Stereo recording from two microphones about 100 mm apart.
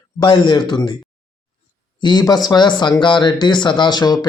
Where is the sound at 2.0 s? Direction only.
40° left (ahead or behind).